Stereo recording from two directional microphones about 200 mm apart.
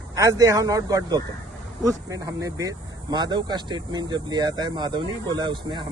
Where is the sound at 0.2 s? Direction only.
15° right (ahead or behind).